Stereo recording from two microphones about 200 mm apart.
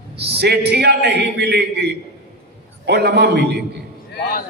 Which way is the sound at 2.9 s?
55° right (ahead or behind).